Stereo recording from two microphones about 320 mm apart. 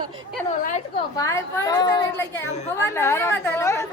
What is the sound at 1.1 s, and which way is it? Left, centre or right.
A woman's voice, centre.